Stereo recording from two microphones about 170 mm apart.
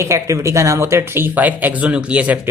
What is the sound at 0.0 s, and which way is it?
Speech, 15° right (ahead or behind).